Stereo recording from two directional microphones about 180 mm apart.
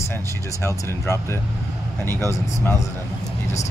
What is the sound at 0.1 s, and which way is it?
Speech, 15° left (ahead or behind).